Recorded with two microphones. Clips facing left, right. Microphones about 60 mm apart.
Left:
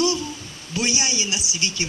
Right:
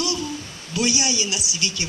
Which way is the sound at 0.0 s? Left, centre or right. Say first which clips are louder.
Left 4 dB; left.